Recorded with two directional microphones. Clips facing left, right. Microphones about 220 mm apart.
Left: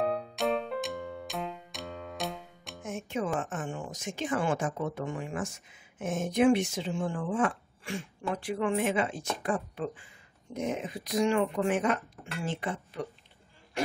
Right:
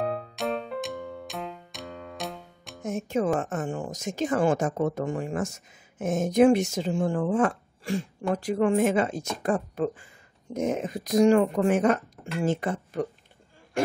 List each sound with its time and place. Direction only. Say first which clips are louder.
0.0 s music: even; centre (ahead or behind)
2.8 s speech: right 7 dB; 40° right (ahead or behind)